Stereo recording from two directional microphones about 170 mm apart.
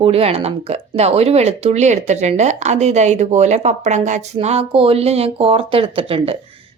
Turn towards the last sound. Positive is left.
turn(degrees=-35)  # may be behind; listen again after turning